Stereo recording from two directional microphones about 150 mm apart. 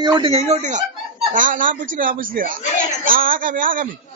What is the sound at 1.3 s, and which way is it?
A man's voice, 65° right (ahead or behind).